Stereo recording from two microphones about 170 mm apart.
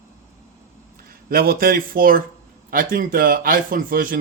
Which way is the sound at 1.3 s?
60° right (ahead or behind).